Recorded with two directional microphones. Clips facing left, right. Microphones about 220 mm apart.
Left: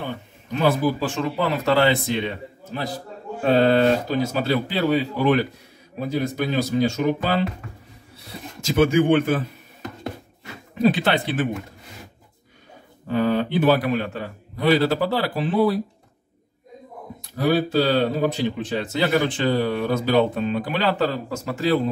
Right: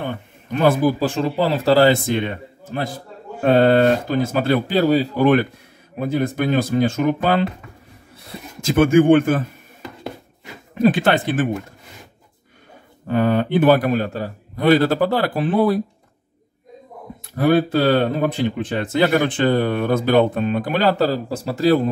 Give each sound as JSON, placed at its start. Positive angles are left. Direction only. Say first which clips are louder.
{"t": 0.0, "sound": "speech", "louder": "right 3 dB", "side_deg": -55}
{"t": 5.1, "sound": "speech", "louder": "right 4 dB", "side_deg": -55}
{"t": 8.5, "sound": "speech", "louder": "right 4 dB", "side_deg": -50}
{"t": 10.7, "sound": "speech", "louder": "right 3 dB", "side_deg": -50}
{"t": 13.0, "sound": "speech", "louder": "right 3 dB", "side_deg": -55}
{"t": 17.4, "sound": "speech", "louder": "right 3 dB", "side_deg": -55}